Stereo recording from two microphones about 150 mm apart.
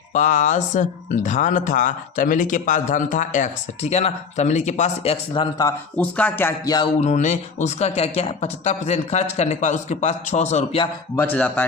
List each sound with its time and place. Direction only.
0.1 s speech: 55° left (ahead or behind)
5.3 s speech: 30° left (ahead or behind)
6.0 s speech: 10° left (ahead or behind)
7.0 s speech: 50° left (ahead or behind)
11.2 s speech: 10° left (ahead or behind)